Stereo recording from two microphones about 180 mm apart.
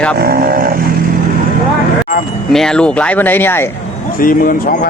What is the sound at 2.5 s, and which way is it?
Speech, 5° left (ahead or behind).